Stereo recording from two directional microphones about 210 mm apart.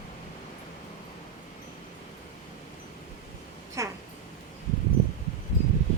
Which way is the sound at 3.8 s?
15° right (ahead or behind).